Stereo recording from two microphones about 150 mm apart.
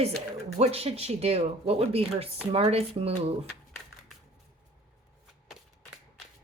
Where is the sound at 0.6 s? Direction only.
40° right (ahead or behind).